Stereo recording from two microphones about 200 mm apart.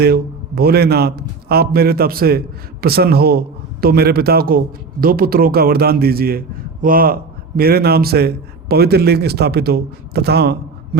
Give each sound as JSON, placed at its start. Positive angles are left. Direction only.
{"t": 0.0, "sound": "a man's voice", "side_deg": -50}